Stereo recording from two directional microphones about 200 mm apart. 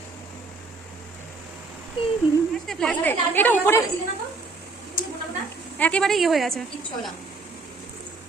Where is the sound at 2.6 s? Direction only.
Centre (ahead or behind).